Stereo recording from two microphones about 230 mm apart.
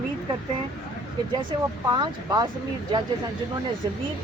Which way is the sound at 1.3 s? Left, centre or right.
Centre.